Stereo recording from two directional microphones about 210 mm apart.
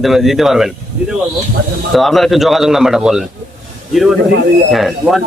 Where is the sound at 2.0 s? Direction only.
Centre (ahead or behind).